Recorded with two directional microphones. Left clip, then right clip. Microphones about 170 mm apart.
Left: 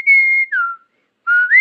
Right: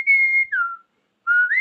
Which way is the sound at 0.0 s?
10° left (ahead or behind).